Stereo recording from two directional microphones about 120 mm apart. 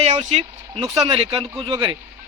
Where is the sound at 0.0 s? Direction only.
65° right (ahead or behind).